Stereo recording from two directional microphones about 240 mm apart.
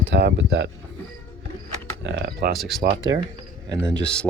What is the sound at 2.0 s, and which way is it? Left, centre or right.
Speech, right.